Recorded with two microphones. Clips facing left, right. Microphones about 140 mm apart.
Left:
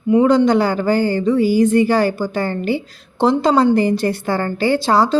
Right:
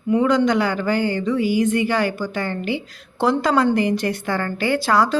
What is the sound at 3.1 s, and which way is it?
Speech, 25° left (ahead or behind).